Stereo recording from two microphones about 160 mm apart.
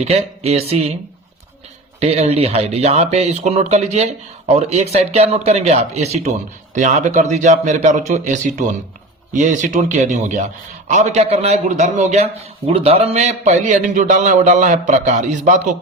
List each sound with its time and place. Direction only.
0.0 s speech: 40° right (ahead or behind)
2.0 s a man's voice: 40° right (ahead or behind)